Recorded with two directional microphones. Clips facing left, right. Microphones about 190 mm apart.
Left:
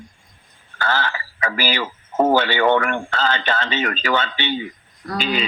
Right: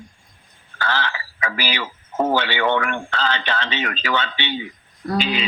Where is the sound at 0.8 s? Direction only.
45° left (ahead or behind).